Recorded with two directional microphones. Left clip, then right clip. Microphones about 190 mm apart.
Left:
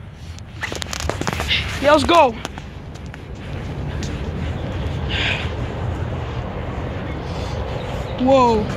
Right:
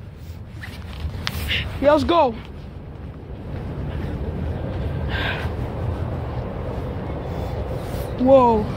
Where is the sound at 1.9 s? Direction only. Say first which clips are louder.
Left 3 dB; 20° right (ahead or behind).